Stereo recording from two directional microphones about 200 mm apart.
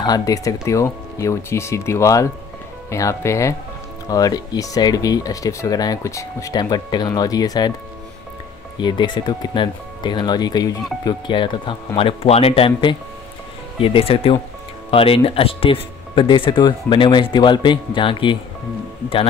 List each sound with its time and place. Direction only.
0.0 s speech: 20° left (ahead or behind)
8.7 s speech: 25° left (ahead or behind)